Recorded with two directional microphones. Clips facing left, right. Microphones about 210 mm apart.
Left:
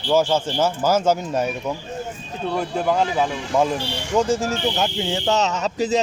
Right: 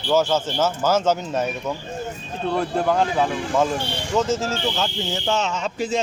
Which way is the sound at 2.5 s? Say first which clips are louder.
Even; 5° left (ahead or behind).